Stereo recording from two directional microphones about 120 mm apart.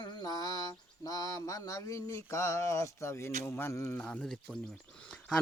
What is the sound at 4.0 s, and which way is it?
Speech, 10° left (ahead or behind).